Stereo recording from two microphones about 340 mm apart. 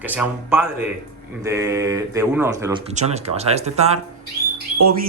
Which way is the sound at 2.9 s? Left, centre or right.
Centre.